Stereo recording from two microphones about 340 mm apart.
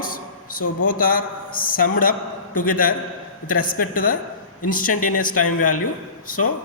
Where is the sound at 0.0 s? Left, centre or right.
Left.